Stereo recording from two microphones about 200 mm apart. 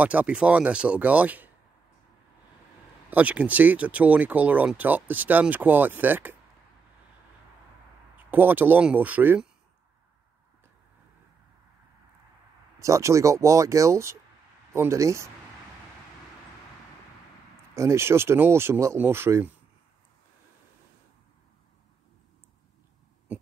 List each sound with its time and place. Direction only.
0.0 s speech: 5° right (ahead or behind)
3.1 s speech: 5° right (ahead or behind)
8.3 s speech: 10° right (ahead or behind)
12.7 s speech: 15° right (ahead or behind)
17.7 s speech: 15° right (ahead or behind)